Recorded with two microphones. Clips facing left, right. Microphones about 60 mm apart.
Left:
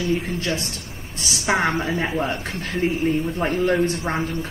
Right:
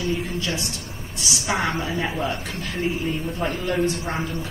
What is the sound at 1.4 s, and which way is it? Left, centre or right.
A woman's voice, left.